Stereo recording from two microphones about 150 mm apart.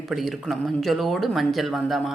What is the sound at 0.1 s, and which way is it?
A woman's voice, centre (ahead or behind).